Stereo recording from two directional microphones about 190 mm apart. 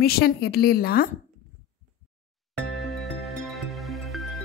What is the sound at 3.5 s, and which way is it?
Music, centre (ahead or behind).